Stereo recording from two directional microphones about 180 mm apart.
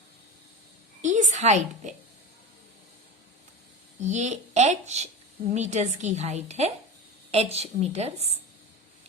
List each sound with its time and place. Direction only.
1.0 s a woman's voice: 40° right (ahead or behind)
4.0 s a woman's voice: 40° right (ahead or behind)